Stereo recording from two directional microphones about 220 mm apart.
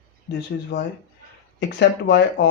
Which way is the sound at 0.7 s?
50° left (ahead or behind).